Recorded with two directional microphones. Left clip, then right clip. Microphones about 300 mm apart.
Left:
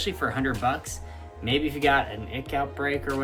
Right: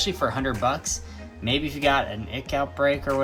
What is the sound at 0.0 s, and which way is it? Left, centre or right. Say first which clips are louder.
Speech: right 2 dB; centre.